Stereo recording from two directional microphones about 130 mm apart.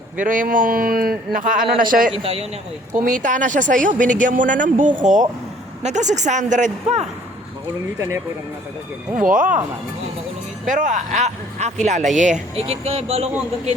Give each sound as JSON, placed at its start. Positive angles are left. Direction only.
{"t": 0.2, "sound": "a man's voice", "side_deg": -90}
{"t": 2.1, "sound": "speech", "side_deg": -50}
{"t": 2.9, "sound": "speech", "side_deg": -85}
{"t": 5.8, "sound": "a man's voice", "side_deg": -65}
{"t": 9.1, "sound": "a man's voice", "side_deg": -90}
{"t": 10.7, "sound": "speech", "side_deg": -80}
{"t": 12.6, "sound": "speech", "side_deg": -50}